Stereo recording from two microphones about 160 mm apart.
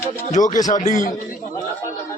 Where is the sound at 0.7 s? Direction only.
50° left (ahead or behind).